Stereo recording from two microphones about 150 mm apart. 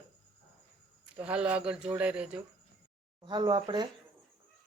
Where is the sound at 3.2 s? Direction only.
30° right (ahead or behind).